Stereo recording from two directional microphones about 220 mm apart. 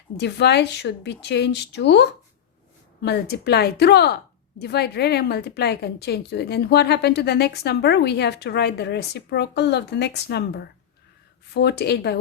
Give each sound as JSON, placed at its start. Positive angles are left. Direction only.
{"t": 0.2, "sound": "a woman's voice", "side_deg": 50}